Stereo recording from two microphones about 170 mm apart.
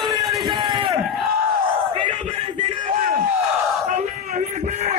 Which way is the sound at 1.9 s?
30° right (ahead or behind).